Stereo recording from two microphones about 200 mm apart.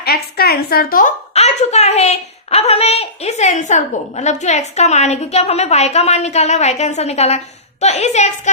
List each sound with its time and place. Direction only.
0.0 s a woman's voice: 50° left (ahead or behind); by 8.3 s 35° left (ahead or behind)